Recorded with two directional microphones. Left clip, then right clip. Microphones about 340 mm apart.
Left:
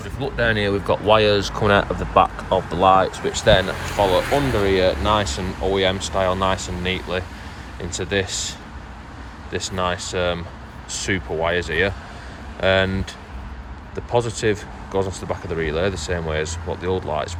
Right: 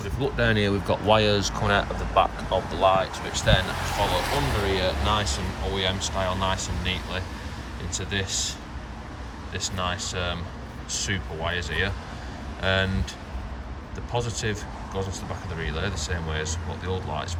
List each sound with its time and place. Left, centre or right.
0.2 s speech: centre
2.6 s speech: centre
3.9 s speech: right
4.6 s speech: centre